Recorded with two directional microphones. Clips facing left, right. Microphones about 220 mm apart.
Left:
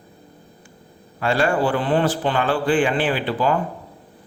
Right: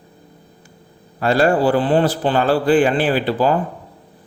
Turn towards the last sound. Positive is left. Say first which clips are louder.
# right 4 dB
turn(degrees=-40)  # may be behind; listen again after turning